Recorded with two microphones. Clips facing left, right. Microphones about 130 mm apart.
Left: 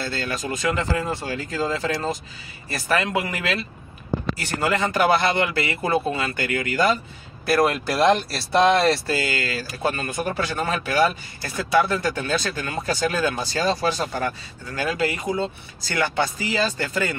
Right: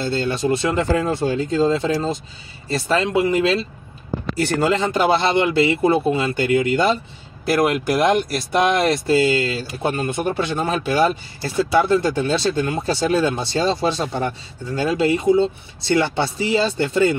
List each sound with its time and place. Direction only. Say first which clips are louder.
0.0 s speech: right 7 dB; 30° right (ahead or behind)
4.6 s speech: even; 25° right (ahead or behind)